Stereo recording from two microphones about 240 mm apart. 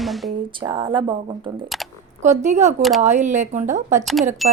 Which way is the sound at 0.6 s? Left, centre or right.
Centre.